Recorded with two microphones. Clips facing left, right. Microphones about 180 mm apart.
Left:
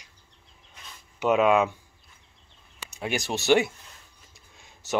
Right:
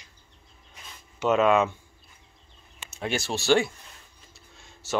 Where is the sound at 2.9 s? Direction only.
15° left (ahead or behind).